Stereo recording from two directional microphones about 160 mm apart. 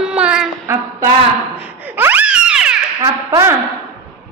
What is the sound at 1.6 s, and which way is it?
Laughter, 10° right (ahead or behind).